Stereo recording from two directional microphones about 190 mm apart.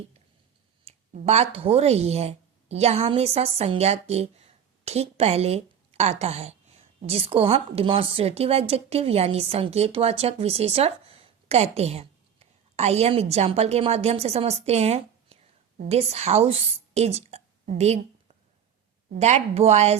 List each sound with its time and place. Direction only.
0.9 s a woman's voice: 35° right (ahead or behind)
17.7 s a sound: 35° right (ahead or behind)
19.2 s a woman's voice: 35° right (ahead or behind)